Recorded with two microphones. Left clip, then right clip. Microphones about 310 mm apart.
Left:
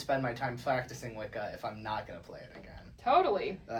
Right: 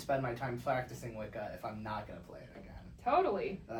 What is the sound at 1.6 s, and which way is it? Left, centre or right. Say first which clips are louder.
Speech: left 4 dB; left.